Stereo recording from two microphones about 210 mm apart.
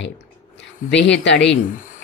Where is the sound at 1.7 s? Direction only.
40° left (ahead or behind).